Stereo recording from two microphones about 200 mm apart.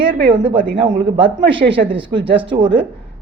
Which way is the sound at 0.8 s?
25° right (ahead or behind).